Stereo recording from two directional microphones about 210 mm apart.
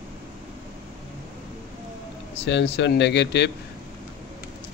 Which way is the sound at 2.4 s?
55° left (ahead or behind).